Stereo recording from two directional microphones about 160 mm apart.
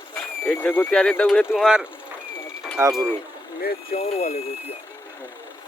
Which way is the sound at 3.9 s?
40° left (ahead or behind).